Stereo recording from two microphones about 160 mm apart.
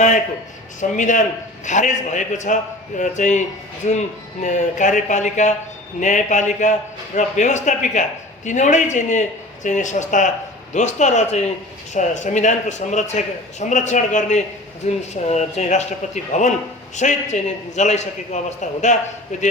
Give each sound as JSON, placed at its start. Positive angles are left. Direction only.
{"t": 0.8, "sound": "a man's voice", "side_deg": 50}